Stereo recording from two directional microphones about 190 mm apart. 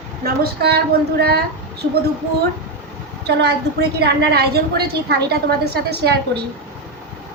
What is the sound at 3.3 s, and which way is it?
A woman's voice, 60° right (ahead or behind).